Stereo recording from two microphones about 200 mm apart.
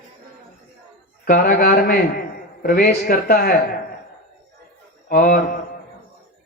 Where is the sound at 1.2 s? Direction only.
50° left (ahead or behind).